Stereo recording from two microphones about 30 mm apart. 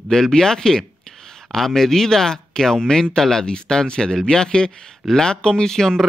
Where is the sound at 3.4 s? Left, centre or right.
Left.